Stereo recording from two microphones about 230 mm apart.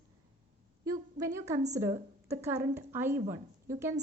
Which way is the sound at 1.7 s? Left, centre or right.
Centre.